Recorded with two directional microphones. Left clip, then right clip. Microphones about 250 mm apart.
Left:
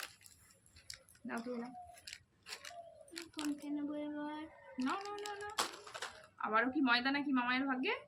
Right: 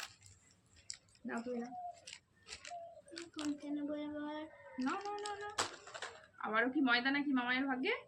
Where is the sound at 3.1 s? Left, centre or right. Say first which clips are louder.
Left 1 dB; centre.